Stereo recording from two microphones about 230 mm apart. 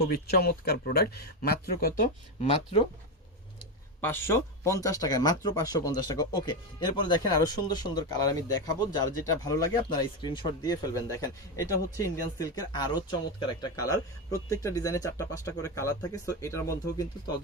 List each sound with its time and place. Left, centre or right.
0.0 s speech: left
2.4 s speech: left
4.0 s speech: centre